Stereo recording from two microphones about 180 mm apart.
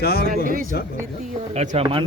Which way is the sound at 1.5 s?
35° right (ahead or behind).